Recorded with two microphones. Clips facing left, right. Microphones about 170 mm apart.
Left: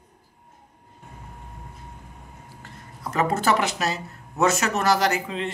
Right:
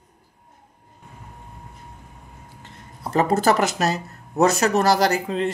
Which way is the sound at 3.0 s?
35° right (ahead or behind).